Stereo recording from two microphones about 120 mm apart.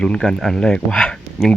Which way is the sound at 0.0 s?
5° left (ahead or behind).